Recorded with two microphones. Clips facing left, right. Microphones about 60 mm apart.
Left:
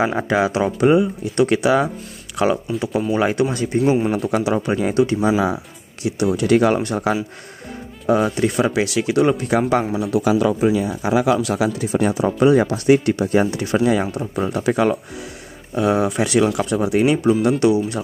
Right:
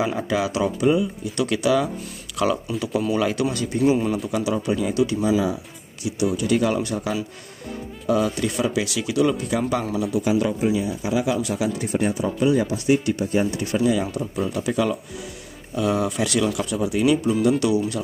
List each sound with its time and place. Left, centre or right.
0.0 s speech: left
0.7 s speech: left
10.0 s speech: left
12.3 s speech: left
14.3 s speech: left
15.7 s speech: left
16.4 s speech: left